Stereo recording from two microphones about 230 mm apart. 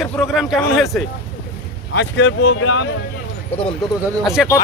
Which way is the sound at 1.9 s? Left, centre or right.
Left.